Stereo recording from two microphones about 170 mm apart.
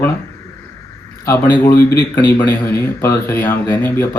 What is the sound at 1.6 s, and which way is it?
A man's voice, 10° left (ahead or behind).